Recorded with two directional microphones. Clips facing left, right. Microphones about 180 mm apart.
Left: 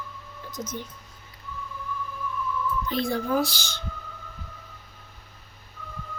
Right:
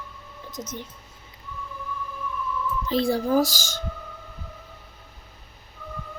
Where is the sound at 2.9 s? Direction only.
30° right (ahead or behind).